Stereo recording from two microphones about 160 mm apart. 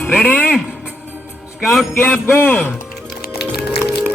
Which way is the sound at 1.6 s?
Centre (ahead or behind).